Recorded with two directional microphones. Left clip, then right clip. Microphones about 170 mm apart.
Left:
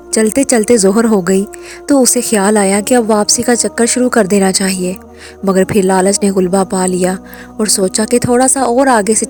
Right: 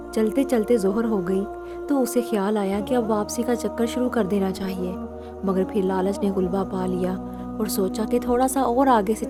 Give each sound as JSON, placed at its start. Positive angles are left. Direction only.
{"t": 0.1, "sound": "a woman's voice", "side_deg": 40}
{"t": 5.9, "sound": "a woman's voice", "side_deg": 40}